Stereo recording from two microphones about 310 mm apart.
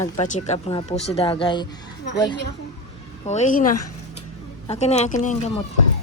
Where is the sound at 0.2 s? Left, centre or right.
Left.